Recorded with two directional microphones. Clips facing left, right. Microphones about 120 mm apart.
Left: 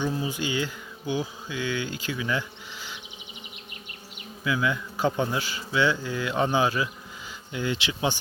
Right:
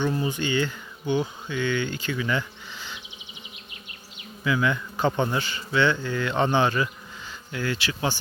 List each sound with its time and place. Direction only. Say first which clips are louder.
0.0 s speech: right 2 dB; 5° left (ahead or behind)
4.4 s speech: right 2 dB; 5° left (ahead or behind)
7.5 s speech: even; 20° left (ahead or behind)